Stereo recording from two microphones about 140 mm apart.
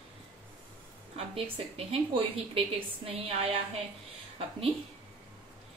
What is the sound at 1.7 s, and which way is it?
A woman's voice, 40° right (ahead or behind).